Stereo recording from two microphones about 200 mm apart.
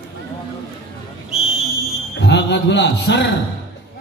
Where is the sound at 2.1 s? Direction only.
60° left (ahead or behind).